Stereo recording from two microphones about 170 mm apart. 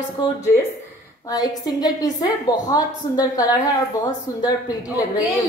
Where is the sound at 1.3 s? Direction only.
20° left (ahead or behind).